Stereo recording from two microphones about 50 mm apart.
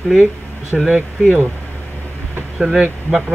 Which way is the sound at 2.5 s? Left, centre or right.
Centre.